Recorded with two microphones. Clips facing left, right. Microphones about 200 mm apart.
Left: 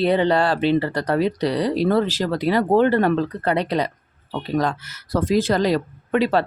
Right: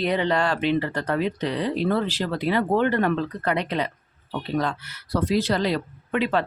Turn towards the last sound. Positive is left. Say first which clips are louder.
# left 4 dB
turn(degrees=40)  # may be behind; listen again after turning